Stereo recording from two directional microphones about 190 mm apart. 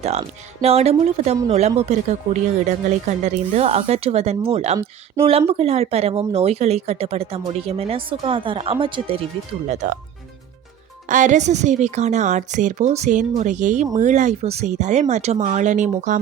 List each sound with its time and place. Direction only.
0.0 s speech: 35° right (ahead or behind)
9.6 s speech: 40° right (ahead or behind)
11.1 s speech: 40° right (ahead or behind)